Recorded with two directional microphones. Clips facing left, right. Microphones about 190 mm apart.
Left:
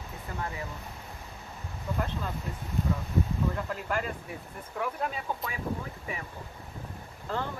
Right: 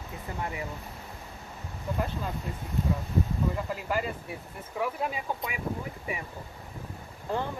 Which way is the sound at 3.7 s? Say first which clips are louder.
Right 1 dB; 5° right (ahead or behind).